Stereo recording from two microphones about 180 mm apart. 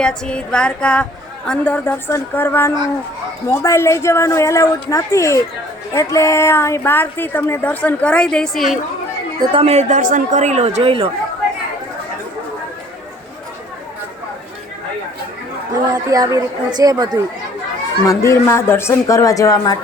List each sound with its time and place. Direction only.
0.0 s a sound: 5° left (ahead or behind)
1.5 s speech: 10° left (ahead or behind)
9.4 s speech: 30° right (ahead or behind)
15.9 s a woman's voice: 20° right (ahead or behind)
18.0 s speech: 15° left (ahead or behind)